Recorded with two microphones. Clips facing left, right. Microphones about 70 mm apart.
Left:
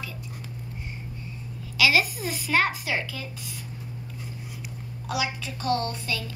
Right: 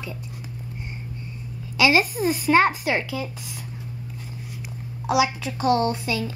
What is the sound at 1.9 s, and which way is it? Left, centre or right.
Speech, right.